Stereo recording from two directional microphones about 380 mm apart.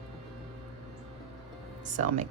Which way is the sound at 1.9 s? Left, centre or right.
Centre.